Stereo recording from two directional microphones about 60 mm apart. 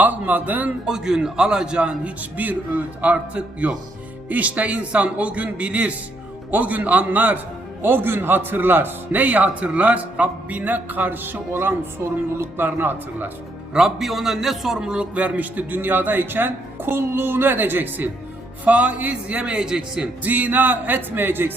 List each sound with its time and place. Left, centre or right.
0.0 s a man's voice: right
0.9 s a man's voice: centre; by 13.3 s right
13.7 s a man's voice: centre
15.1 s a man's voice: right
20.2 s a man's voice: right